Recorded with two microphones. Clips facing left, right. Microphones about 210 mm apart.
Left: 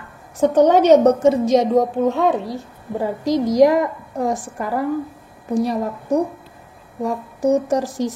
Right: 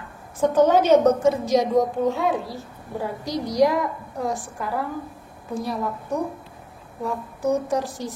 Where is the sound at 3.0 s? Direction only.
90° left.